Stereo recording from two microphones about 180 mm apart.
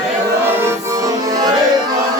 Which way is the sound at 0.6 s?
20° right (ahead or behind).